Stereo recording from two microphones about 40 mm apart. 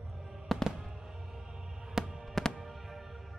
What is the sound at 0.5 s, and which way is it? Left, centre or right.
Fireworks, centre.